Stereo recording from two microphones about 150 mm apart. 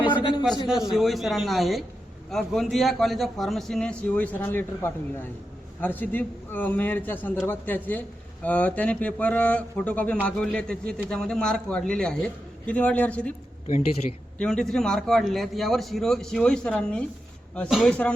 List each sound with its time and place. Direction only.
0.1 s a sound: 30° left (ahead or behind)
0.5 s a man's voice: 30° left (ahead or behind)
0.9 s a man's voice: centre (ahead or behind)
13.7 s a man's voice: 50° left (ahead or behind)
14.3 s a man's voice: 5° left (ahead or behind)